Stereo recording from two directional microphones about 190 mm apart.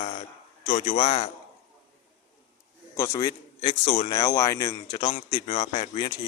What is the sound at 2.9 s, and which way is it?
Speech, 15° left (ahead or behind).